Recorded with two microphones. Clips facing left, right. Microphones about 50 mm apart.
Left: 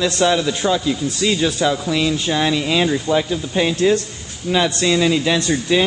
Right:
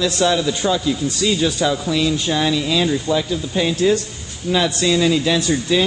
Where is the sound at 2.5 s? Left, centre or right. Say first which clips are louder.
Left 1 dB; left.